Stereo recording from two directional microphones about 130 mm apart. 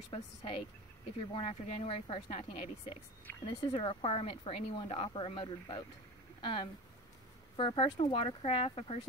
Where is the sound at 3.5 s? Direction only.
45° left (ahead or behind).